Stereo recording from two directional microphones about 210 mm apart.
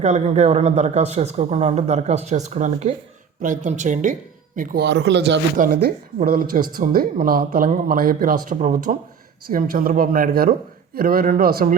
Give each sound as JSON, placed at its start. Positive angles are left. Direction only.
{"t": 0.0, "sound": "a man's voice", "side_deg": -30}
{"t": 5.5, "sound": "a man's voice", "side_deg": -45}